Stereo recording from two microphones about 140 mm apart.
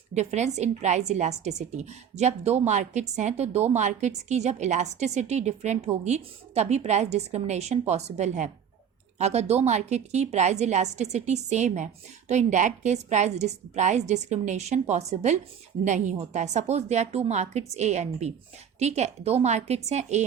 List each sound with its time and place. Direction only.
0.1 s a woman's voice: 55° right (ahead or behind)